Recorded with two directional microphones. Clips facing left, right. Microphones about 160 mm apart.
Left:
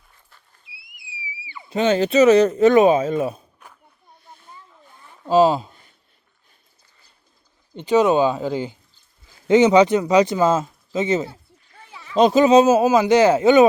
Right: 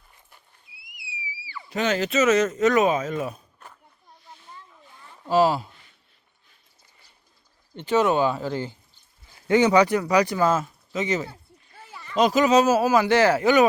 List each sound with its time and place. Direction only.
0.7 s a sound: 90° left
1.5 s speech: 20° left (ahead or behind)
5.2 s speech: 20° left (ahead or behind)
7.8 s speech: 15° left (ahead or behind)
11.9 s a sound: centre (ahead or behind)
12.1 s speech: 30° left (ahead or behind)